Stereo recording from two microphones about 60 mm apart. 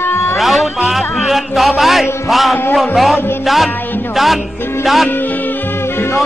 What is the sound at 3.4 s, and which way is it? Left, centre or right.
Speech, centre.